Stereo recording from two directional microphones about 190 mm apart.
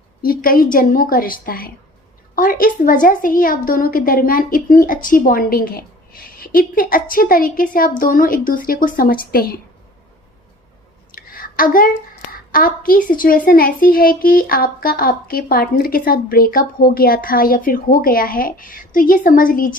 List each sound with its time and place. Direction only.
0.2 s a child's voice: 50° left (ahead or behind)
11.1 s a sound: 50° left (ahead or behind)
12.3 s a child's voice: 45° left (ahead or behind)